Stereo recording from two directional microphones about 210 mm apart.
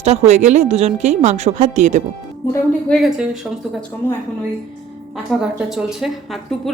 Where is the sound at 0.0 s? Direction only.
30° right (ahead or behind).